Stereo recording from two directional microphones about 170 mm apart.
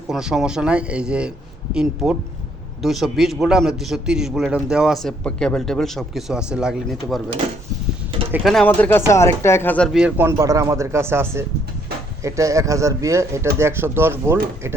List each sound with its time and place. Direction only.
0.1 s a man's voice: 5° right (ahead or behind)
8.4 s speech: 5° left (ahead or behind)
10.2 s speech: 15° right (ahead or behind)